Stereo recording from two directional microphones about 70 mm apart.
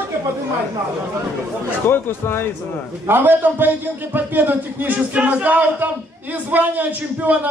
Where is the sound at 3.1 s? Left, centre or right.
Right.